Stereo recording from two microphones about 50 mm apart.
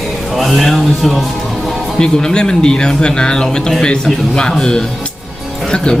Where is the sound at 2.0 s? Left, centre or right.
Centre.